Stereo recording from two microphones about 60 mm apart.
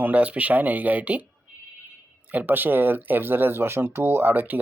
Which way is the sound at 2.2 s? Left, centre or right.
Right.